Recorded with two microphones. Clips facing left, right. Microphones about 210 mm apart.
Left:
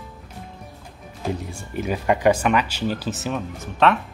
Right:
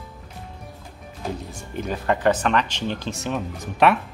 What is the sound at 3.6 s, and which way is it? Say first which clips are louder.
Speech: right 1 dB; 10° right (ahead or behind).